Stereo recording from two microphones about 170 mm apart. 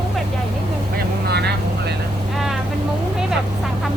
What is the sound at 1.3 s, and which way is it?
Vehicle, 75° right (ahead or behind).